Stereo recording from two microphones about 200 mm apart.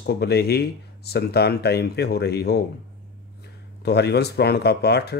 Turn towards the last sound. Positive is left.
turn(degrees=55)  # may be behind; listen again after turning